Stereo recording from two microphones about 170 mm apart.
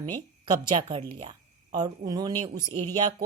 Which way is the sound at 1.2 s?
25° right (ahead or behind).